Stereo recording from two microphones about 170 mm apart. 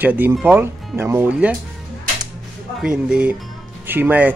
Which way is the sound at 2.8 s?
5° right (ahead or behind).